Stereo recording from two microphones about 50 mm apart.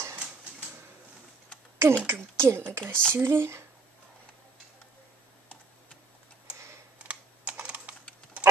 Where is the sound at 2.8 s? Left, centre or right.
Centre.